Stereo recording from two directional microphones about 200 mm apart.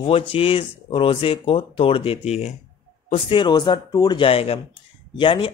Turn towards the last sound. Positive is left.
turn(degrees=25)  # may be behind; listen again after turning